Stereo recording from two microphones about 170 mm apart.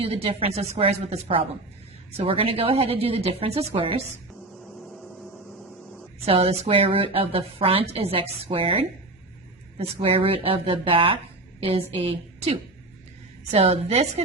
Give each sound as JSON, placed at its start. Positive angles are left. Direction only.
{"t": 0.0, "sound": "a woman's voice", "side_deg": -35}
{"t": 4.9, "sound": "vehicle", "side_deg": 0}
{"t": 6.2, "sound": "a woman's voice", "side_deg": -35}